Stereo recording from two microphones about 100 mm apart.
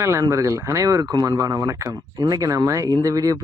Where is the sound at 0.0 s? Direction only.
30° right (ahead or behind).